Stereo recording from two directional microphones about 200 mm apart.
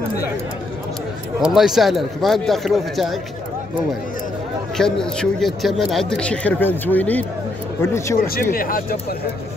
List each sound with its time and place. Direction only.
1.4 s speech: centre (ahead or behind)
5.0 s speech: 5° left (ahead or behind)
8.3 s speech: 45° left (ahead or behind)